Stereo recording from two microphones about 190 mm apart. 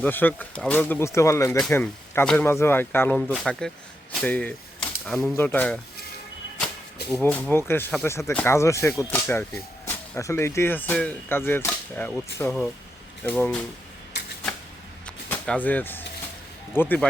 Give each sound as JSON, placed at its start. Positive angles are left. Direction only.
{"t": 0.0, "sound": "speech", "side_deg": 10}
{"t": 7.1, "sound": "speech", "side_deg": 10}
{"t": 15.0, "sound": "a sound", "side_deg": 5}
{"t": 16.7, "sound": "speech", "side_deg": 10}